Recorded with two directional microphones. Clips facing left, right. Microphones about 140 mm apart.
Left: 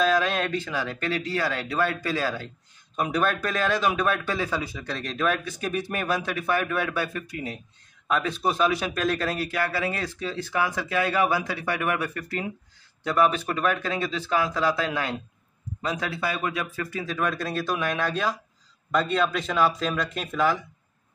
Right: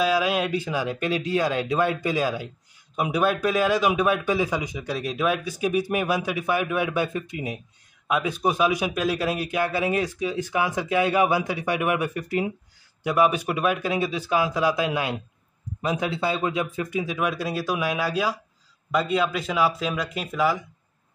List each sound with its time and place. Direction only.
0.0 s a man's voice: 10° right (ahead or behind)